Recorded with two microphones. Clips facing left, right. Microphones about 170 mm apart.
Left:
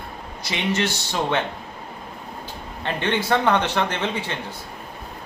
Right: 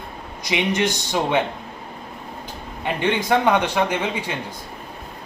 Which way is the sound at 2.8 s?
10° right (ahead or behind).